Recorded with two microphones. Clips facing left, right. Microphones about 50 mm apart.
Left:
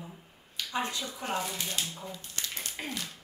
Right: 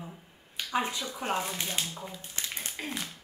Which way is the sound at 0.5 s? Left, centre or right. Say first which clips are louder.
Right 2 dB; centre.